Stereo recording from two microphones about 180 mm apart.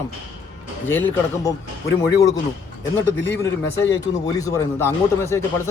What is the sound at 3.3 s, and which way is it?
A man's voice, 15° left (ahead or behind).